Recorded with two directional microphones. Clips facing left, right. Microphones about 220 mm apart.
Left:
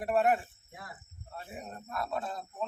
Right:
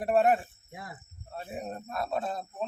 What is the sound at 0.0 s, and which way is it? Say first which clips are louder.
Speech: right 3 dB; 25° right (ahead or behind).